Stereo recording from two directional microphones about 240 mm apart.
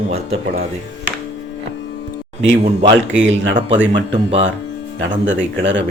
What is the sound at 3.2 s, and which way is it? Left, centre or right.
Speech, right.